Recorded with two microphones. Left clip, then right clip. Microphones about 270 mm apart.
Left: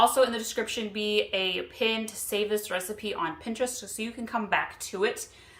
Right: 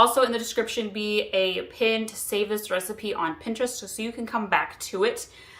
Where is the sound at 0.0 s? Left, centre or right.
Centre.